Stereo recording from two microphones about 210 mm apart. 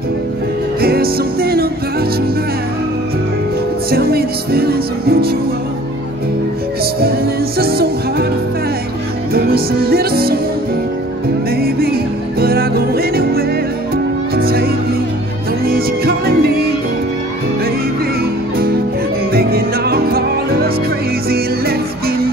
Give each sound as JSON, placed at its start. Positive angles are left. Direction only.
{"t": 0.7, "sound": "music", "side_deg": -45}
{"t": 3.9, "sound": "music", "side_deg": -45}
{"t": 7.5, "sound": "music", "side_deg": -45}
{"t": 9.3, "sound": "music", "side_deg": -45}
{"t": 11.5, "sound": "music", "side_deg": -45}
{"t": 19.3, "sound": "music", "side_deg": -45}